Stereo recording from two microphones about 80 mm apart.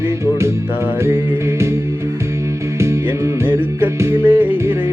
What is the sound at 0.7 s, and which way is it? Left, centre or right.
Music, right.